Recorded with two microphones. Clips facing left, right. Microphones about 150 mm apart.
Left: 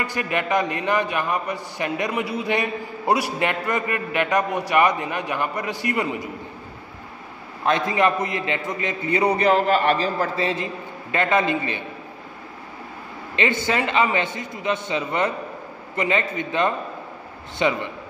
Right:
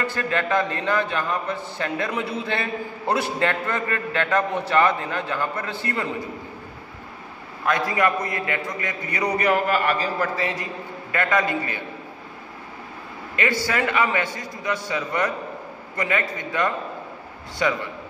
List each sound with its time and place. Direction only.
0.0 s a man's voice: 15° left (ahead or behind)
7.6 s a man's voice: 25° left (ahead or behind)
13.4 s a man's voice: 20° left (ahead or behind)